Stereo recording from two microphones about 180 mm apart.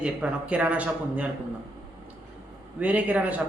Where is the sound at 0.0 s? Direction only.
5° right (ahead or behind).